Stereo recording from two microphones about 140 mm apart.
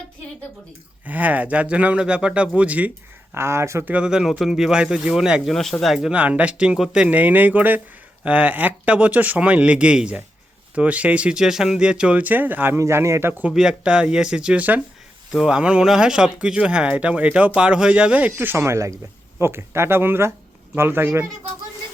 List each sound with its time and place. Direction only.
1.0 s speech: 10° right (ahead or behind)